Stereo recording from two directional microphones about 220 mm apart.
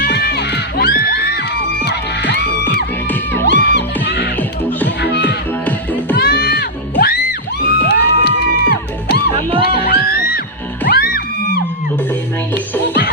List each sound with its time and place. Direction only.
0.0 s music: 45° left (ahead or behind)
3.4 s music: 50° left (ahead or behind)
5.6 s music: 10° left (ahead or behind)
6.1 s music: 45° left (ahead or behind)